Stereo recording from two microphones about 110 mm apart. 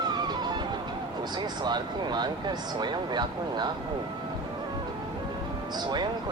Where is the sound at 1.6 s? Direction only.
40° right (ahead or behind).